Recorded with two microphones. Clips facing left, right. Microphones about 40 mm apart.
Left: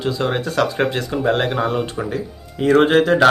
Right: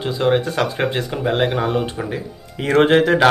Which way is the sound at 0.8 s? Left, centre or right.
Centre.